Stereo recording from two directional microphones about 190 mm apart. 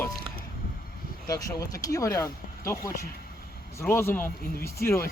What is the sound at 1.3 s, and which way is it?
Speech, 20° left (ahead or behind).